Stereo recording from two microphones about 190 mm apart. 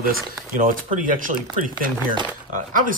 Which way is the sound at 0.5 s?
45° right (ahead or behind).